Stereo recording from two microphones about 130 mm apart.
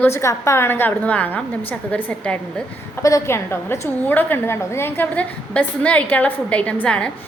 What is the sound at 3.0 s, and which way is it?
A woman's voice, 20° left (ahead or behind).